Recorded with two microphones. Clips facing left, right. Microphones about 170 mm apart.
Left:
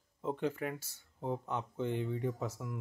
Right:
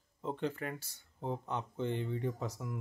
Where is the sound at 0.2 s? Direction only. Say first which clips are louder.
Left 2 dB; 5° left (ahead or behind).